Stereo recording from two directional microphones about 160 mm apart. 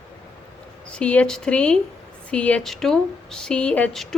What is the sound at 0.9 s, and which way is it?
Speech, 5° left (ahead or behind).